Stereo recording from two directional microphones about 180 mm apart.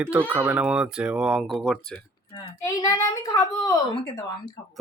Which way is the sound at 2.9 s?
20° left (ahead or behind).